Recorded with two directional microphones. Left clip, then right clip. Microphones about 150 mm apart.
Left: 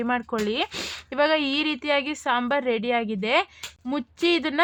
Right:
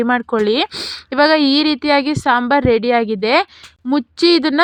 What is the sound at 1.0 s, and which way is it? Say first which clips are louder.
A woman's voice: right 10 dB; 40° right (ahead or behind).